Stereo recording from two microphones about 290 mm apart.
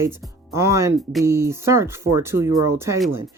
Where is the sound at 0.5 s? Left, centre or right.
Centre.